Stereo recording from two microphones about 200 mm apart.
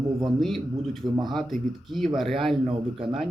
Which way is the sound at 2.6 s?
25° right (ahead or behind).